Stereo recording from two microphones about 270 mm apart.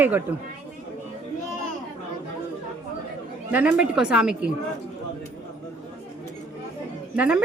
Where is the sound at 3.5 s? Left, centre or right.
Centre.